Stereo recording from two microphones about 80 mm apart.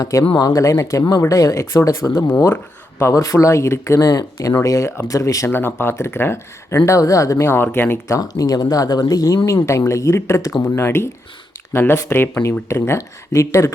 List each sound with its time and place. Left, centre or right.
0.0 s speech: left
5.5 s speech: left
6.8 s speech: left
8.2 s speech: left